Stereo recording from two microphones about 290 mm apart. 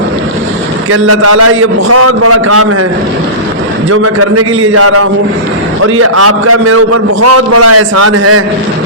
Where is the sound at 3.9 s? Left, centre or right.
Right.